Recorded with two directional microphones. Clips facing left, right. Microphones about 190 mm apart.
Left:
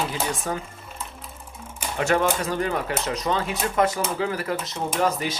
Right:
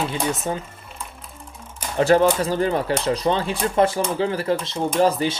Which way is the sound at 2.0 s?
35° right (ahead or behind).